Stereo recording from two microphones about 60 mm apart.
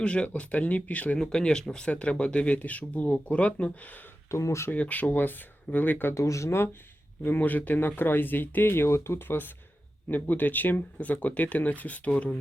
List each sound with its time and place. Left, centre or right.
0.0 s speech: centre
1.2 s speech: centre
4.3 s speech: left
4.7 s speech: left
6.1 s speech: left
7.2 s speech: left